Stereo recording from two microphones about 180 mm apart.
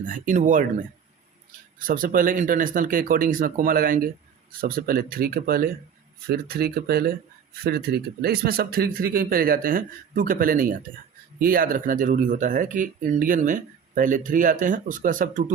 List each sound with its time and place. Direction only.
0.0 s a man's voice: 45° right (ahead or behind)